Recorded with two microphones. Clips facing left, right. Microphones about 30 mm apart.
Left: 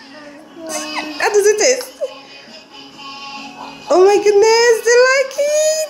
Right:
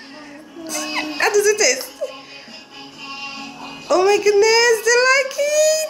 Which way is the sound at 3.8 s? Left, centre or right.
Centre.